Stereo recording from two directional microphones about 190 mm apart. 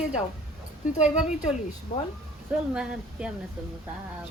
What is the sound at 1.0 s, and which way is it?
Speech, 5° right (ahead or behind).